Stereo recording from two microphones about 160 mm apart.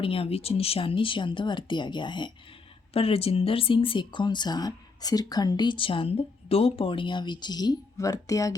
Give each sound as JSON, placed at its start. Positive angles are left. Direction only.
{"t": 0.0, "sound": "speech", "side_deg": 35}